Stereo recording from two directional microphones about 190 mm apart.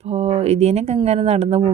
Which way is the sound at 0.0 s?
35° right (ahead or behind).